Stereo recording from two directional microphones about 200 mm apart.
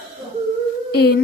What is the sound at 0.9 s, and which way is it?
Speech, 50° left (ahead or behind).